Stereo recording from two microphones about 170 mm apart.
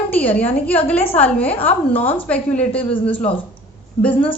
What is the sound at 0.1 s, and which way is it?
A woman's voice, 10° left (ahead or behind).